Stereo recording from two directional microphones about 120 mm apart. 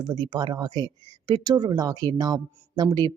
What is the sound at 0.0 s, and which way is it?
Speech, 35° right (ahead or behind).